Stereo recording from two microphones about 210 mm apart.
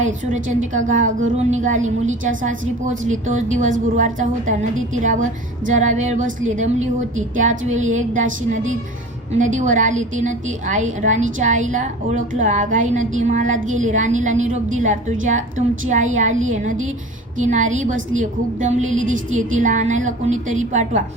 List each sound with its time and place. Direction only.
0.0 s a woman's voice: 35° right (ahead or behind)